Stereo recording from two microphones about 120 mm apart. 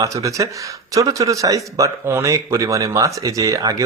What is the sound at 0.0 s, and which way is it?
Speech, 25° right (ahead or behind).